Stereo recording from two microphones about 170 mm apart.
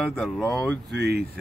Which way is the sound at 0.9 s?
80° right.